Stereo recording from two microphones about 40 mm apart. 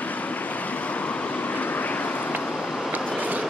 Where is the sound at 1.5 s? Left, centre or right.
Left.